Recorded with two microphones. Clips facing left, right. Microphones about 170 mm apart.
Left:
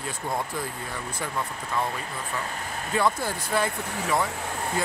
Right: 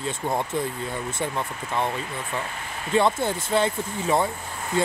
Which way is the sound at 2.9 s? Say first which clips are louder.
Right 4 dB; 25° right (ahead or behind).